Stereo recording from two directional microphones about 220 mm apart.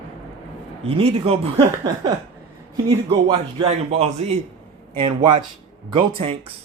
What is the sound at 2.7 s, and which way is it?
A man's voice, 20° right (ahead or behind).